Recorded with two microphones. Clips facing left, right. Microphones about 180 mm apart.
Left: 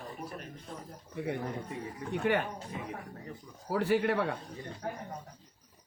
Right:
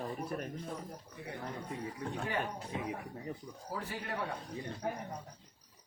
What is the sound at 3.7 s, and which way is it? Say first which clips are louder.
Speech: left 13 dB; 75° left (ahead or behind).